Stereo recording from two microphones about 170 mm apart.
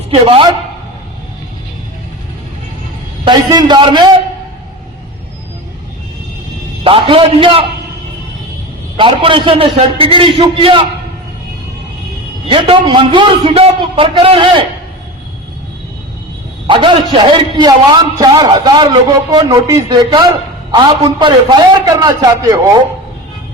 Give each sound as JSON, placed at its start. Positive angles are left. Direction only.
{"t": 0.1, "sound": "a man's voice", "side_deg": -30}
{"t": 3.2, "sound": "a man's voice", "side_deg": -25}
{"t": 6.8, "sound": "a man's voice", "side_deg": -30}
{"t": 9.0, "sound": "a man's voice", "side_deg": -30}
{"t": 12.5, "sound": "a man's voice", "side_deg": -30}
{"t": 16.6, "sound": "a man's voice", "side_deg": -30}